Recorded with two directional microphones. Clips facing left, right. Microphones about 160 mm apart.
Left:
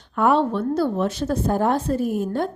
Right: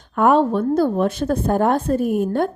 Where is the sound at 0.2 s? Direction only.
45° right (ahead or behind).